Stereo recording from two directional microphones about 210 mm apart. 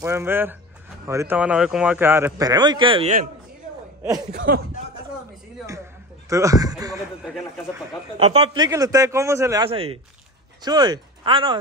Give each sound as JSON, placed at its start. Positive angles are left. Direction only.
{"t": 0.0, "sound": "speech", "side_deg": -10}
{"t": 4.3, "sound": "speech", "side_deg": -45}
{"t": 6.2, "sound": "speech", "side_deg": -15}
{"t": 8.2, "sound": "speech", "side_deg": -30}
{"t": 9.7, "sound": "speech", "side_deg": -25}